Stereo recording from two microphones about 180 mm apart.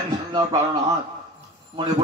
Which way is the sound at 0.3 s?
25° right (ahead or behind).